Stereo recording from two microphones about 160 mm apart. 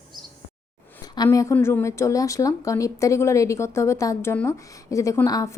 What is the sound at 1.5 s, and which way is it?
Speech, 15° left (ahead or behind).